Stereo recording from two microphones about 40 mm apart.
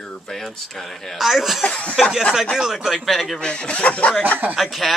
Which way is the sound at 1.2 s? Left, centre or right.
Centre.